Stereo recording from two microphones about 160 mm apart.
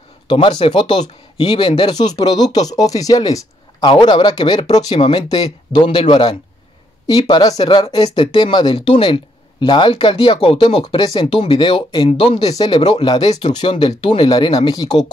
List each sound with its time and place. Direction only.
0.3 s speech: 30° left (ahead or behind)
12.1 s speech: 40° left (ahead or behind)
12.5 s speech: 25° left (ahead or behind)